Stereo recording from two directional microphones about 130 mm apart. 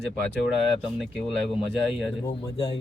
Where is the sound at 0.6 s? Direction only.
Centre (ahead or behind).